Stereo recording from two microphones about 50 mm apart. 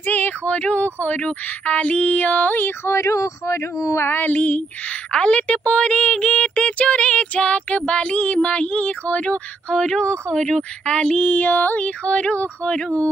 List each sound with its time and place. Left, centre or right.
0.0 s a sound: left
0.5 s speech: left
2.8 s speech: left
4.0 s music: left
5.1 s speech: left
11.2 s music: left
12.0 s speech: left